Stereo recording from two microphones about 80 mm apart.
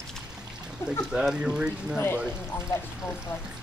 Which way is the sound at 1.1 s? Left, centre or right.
Centre.